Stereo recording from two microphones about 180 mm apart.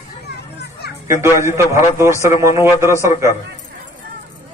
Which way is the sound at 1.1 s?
15° right (ahead or behind).